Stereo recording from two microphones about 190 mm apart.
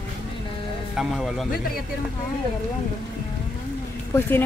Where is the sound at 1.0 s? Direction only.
Centre (ahead or behind).